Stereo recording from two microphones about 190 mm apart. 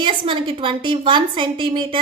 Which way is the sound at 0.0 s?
25° right (ahead or behind).